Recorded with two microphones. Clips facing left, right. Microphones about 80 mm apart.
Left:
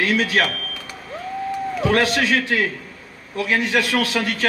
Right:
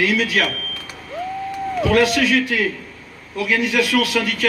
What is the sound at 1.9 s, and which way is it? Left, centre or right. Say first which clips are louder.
A man's voice: right 2 dB; left.